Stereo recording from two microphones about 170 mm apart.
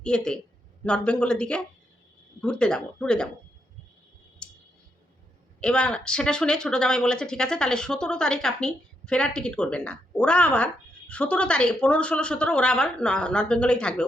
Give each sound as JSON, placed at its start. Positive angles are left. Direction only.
{"t": 0.0, "sound": "speech", "side_deg": 5}
{"t": 4.4, "sound": "clicking", "side_deg": 5}
{"t": 5.5, "sound": "speech", "side_deg": 5}